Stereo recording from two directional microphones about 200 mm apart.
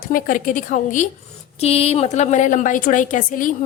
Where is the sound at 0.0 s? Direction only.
45° left (ahead or behind).